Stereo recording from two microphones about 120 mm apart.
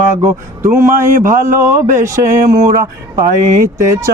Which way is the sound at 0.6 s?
25° right (ahead or behind).